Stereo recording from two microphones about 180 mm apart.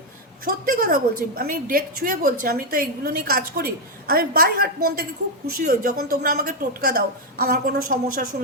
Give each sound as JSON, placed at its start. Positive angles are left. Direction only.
{"t": 0.4, "sound": "a woman's voice", "side_deg": -50}